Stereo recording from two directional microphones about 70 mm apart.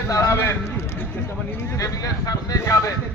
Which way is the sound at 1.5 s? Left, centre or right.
Left.